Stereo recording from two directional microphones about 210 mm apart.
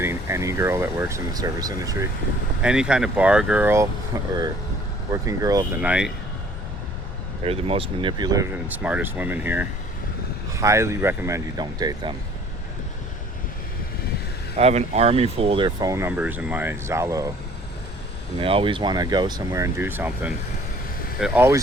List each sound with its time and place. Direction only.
0.0 s speech: 10° right (ahead or behind)
2.6 s speech: 5° right (ahead or behind)
5.8 s speech: 5° right (ahead or behind)
7.4 s speech: 25° right (ahead or behind)
14.5 s speech: 30° right (ahead or behind); by 17.3 s 15° right (ahead or behind)
18.3 s speech: 25° right (ahead or behind)